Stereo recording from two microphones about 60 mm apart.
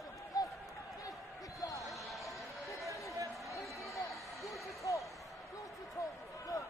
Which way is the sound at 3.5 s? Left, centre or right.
Left.